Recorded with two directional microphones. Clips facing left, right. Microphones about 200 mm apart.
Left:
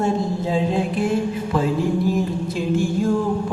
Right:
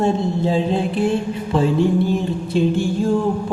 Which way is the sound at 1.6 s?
30° right (ahead or behind).